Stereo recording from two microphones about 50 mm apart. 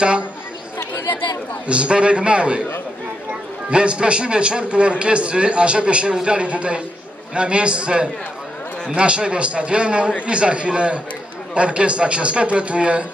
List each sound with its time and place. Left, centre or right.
1.7 s a man's voice: right
3.7 s a man's voice: right